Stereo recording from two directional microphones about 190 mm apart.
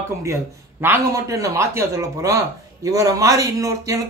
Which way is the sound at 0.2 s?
15° right (ahead or behind).